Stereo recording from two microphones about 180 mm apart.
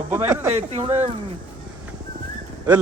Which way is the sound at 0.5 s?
30° right (ahead or behind).